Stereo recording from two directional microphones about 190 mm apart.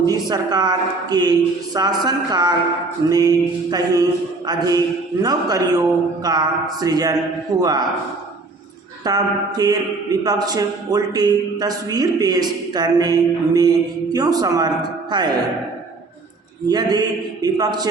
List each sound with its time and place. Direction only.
0.0 s a man's voice: 20° right (ahead or behind)
9.0 s a man's voice: 20° right (ahead or behind)
16.6 s a man's voice: 20° right (ahead or behind)